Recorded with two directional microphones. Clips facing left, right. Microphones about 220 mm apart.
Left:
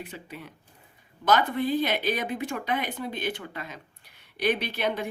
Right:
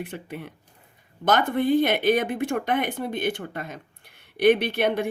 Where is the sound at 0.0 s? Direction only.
55° right (ahead or behind).